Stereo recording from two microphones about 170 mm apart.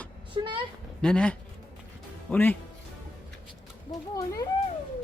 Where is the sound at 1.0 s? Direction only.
5° left (ahead or behind).